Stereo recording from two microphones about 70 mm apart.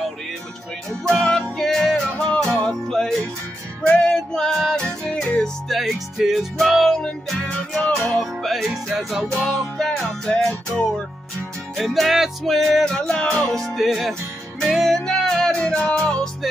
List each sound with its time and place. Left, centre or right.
1.1 s music: centre
2.5 s music: centre
3.8 s music: centre
4.1 s music: centre
5.7 s music: centre
9.3 s music: centre
12.9 s music: centre
13.5 s music: centre